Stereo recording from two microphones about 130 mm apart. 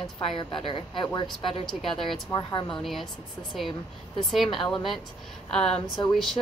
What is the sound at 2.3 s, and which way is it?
Speech, 35° left (ahead or behind).